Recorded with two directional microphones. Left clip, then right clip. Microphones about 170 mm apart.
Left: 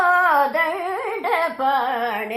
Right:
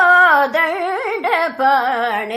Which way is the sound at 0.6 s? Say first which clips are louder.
Right 5 dB; 40° right (ahead or behind).